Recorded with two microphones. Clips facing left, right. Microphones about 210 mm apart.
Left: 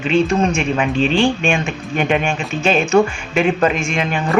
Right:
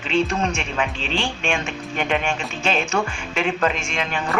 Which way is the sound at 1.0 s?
50° left (ahead or behind).